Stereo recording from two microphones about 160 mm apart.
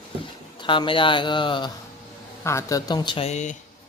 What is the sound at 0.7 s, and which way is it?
Speech, 30° left (ahead or behind).